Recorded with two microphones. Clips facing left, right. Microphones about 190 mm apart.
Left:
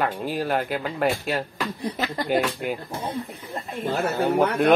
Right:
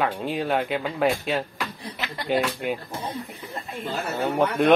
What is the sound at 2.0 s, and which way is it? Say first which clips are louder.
Speech: left 5 dB; 45° left (ahead or behind).